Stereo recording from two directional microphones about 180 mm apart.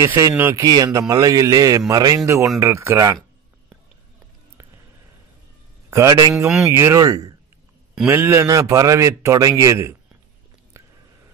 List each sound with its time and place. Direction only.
0.0 s a man's voice: 15° right (ahead or behind)
5.9 s a man's voice: 15° right (ahead or behind)
7.9 s a man's voice: 10° right (ahead or behind)